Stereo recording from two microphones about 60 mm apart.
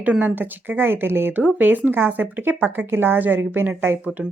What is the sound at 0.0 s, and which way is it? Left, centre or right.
Speech, right.